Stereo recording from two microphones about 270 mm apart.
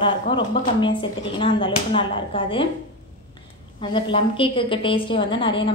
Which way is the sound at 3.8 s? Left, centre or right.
Centre.